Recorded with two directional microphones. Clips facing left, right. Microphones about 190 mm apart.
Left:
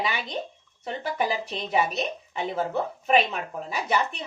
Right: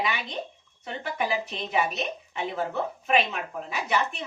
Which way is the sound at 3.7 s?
35° left (ahead or behind).